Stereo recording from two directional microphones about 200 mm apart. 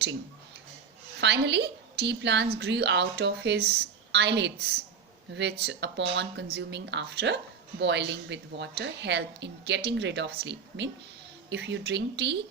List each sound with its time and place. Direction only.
1.2 s a woman's voice: 60° right (ahead or behind)